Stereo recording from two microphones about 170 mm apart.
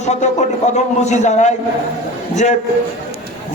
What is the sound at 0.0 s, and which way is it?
A man's voice, 45° left (ahead or behind).